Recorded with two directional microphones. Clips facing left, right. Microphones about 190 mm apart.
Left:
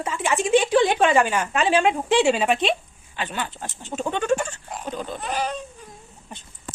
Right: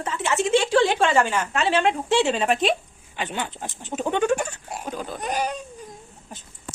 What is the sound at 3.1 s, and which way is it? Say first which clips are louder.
Speech: even; 20° right (ahead or behind).